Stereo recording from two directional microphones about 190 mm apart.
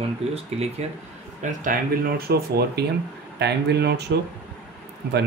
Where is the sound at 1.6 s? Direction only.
50° right (ahead or behind).